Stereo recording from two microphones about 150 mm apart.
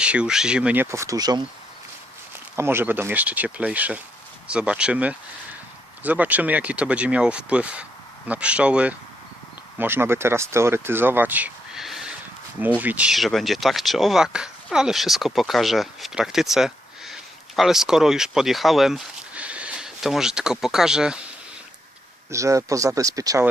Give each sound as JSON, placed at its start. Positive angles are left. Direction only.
{"t": 0.0, "sound": "speech", "side_deg": -5}
{"t": 2.6, "sound": "speech", "side_deg": -15}
{"t": 22.3, "sound": "speech", "side_deg": -20}